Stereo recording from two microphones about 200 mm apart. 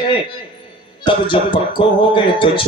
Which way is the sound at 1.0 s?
25° left (ahead or behind).